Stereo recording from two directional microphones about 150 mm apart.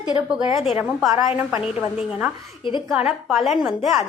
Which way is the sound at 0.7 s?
10° right (ahead or behind).